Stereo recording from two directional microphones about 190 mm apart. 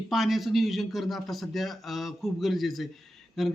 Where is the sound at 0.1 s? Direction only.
Centre (ahead or behind).